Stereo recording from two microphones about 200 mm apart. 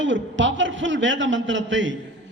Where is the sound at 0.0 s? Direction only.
65° right (ahead or behind).